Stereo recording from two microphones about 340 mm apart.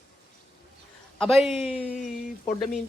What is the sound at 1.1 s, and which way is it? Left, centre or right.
Speech, centre.